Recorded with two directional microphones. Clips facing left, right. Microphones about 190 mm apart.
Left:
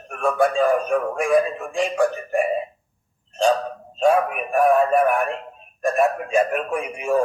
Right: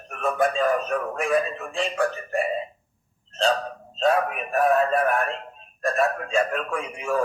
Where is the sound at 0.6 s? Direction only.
10° left (ahead or behind).